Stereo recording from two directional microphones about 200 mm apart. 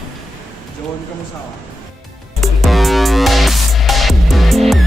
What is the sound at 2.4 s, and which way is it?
Music, centre (ahead or behind).